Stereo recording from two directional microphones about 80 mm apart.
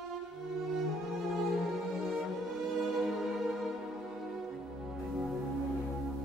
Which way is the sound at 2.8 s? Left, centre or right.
Centre.